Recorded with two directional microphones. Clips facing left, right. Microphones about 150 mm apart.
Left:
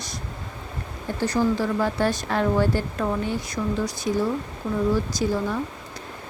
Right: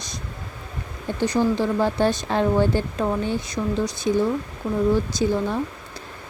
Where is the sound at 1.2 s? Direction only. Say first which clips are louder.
Right 2 dB; 20° right (ahead or behind).